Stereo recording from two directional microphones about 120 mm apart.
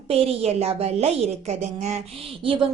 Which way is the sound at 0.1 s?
60° right (ahead or behind).